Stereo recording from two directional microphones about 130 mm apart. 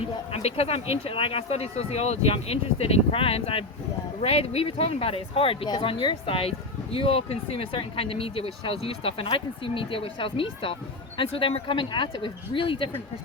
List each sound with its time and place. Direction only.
0.3 s speech: 50° left (ahead or behind)